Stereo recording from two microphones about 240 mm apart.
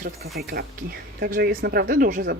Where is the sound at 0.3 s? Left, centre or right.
Right.